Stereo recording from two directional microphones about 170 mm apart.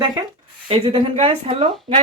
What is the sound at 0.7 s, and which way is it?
A woman's voice, 30° right (ahead or behind).